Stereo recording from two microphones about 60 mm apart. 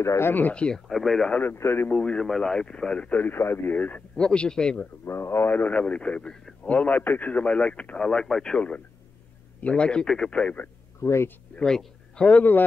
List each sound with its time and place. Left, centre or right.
0.0 s a man's voice: left
0.3 s speech: left
0.6 s speech: centre
0.8 s speech: centre
1.6 s a man's voice: left
1.9 s speech: centre
3.3 s speech: left
4.2 s speech: centre
5.0 s speech: left
5.8 s a man's voice: left
8.5 s a man's voice: left
11.0 s speech: left
11.5 s speech: centre
12.3 s a man's voice: left